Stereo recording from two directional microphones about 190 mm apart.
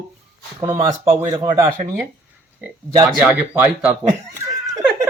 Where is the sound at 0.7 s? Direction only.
20° right (ahead or behind).